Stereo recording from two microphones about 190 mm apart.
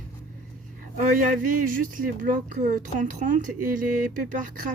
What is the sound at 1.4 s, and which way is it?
Speech, 45° right (ahead or behind).